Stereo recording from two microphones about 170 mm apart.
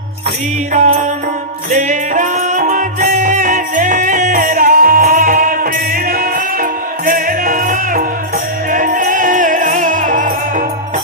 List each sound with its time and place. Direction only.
0.7 s music: 45° right (ahead or behind)